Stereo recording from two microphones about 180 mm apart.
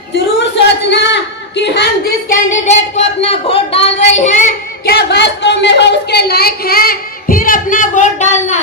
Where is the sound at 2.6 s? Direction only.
40° left (ahead or behind).